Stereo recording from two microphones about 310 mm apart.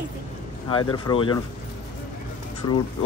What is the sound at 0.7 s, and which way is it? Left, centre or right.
Speech, centre.